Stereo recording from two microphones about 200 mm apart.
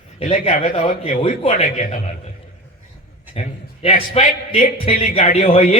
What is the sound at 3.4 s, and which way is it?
A man's voice, 30° left (ahead or behind).